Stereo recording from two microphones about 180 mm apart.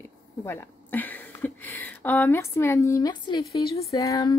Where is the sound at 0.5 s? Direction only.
10° left (ahead or behind).